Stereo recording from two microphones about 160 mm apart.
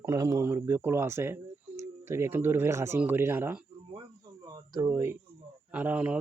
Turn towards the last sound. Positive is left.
turn(degrees=-10)  # may be behind; listen again after turning